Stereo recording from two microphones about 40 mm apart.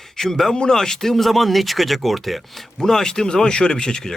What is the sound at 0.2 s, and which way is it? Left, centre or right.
Speech, centre.